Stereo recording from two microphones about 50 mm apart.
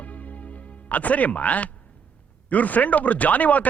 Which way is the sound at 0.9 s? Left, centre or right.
Left.